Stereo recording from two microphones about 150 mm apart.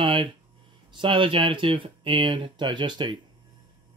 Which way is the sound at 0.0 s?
35° right (ahead or behind).